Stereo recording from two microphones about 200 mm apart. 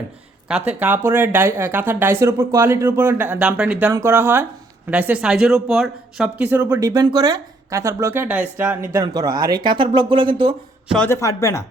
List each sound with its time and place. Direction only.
0.4 s speech: 5° right (ahead or behind); by 10.5 s 25° right (ahead or behind)
10.9 s a man's voice: 10° left (ahead or behind)